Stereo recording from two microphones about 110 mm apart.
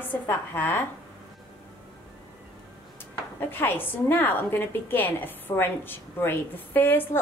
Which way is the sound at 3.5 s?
20° left (ahead or behind).